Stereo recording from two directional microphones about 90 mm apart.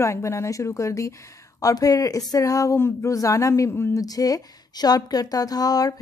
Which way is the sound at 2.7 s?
25° left (ahead or behind).